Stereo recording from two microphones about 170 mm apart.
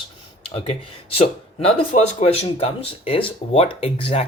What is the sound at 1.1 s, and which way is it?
Speech, 35° left (ahead or behind).